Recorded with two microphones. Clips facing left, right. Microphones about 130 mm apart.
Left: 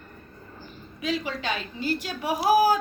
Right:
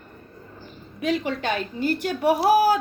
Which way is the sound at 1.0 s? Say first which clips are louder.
Right 4 dB; 55° right (ahead or behind).